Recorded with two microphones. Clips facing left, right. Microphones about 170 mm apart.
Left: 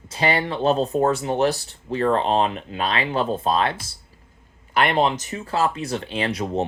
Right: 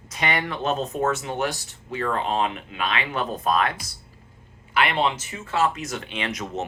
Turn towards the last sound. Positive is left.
turn(degrees=35)  # may be behind; listen again after turning